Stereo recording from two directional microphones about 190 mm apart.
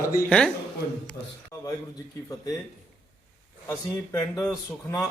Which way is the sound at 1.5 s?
15° left (ahead or behind).